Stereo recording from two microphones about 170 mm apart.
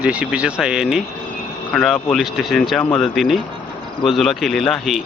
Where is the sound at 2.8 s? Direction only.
10° left (ahead or behind).